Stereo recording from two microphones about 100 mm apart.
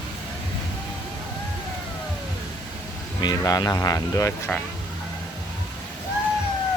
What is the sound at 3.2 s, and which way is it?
Speech, 40° left (ahead or behind).